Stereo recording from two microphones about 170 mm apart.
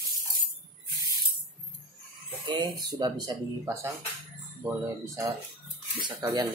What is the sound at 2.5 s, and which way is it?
Speech, 25° right (ahead or behind).